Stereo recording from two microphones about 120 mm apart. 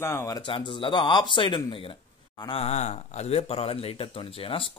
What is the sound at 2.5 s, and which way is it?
Speech, 65° left (ahead or behind).